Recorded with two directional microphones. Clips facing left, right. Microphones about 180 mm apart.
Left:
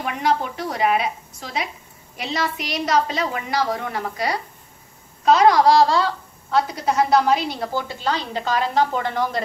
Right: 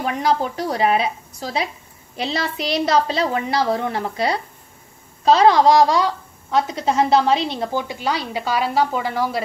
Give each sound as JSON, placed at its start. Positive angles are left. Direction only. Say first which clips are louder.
{"t": 0.0, "sound": "a woman's voice", "louder": "right 2 dB", "side_deg": -35}